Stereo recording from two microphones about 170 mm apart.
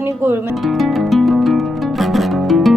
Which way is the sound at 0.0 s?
10° right (ahead or behind).